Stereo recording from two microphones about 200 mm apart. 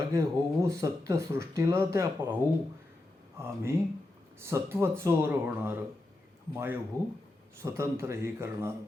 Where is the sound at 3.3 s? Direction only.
10° right (ahead or behind).